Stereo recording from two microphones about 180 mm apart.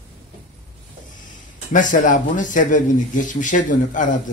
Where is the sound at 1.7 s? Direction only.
45° left (ahead or behind).